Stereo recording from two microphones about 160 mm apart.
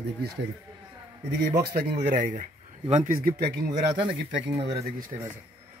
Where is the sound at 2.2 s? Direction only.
55° right (ahead or behind).